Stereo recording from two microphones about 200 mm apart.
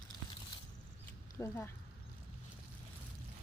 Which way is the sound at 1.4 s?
10° left (ahead or behind).